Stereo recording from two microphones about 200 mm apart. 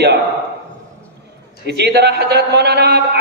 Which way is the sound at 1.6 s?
55° right (ahead or behind).